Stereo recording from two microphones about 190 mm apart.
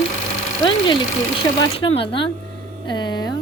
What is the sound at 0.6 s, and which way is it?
Speech, 25° left (ahead or behind).